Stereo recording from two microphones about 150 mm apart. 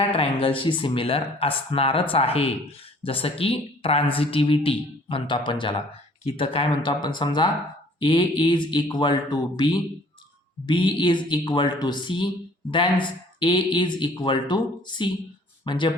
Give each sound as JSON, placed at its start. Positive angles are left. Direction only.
{"t": 0.1, "sound": "speech", "side_deg": 40}